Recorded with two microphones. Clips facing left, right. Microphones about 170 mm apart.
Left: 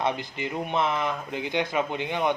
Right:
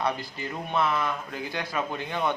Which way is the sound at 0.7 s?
20° left (ahead or behind).